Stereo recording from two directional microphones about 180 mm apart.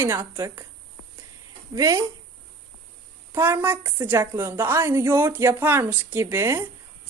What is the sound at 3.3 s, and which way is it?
A woman's voice, 15° right (ahead or behind).